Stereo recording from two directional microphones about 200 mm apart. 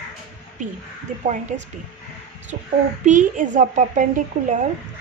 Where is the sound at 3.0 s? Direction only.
40° right (ahead or behind).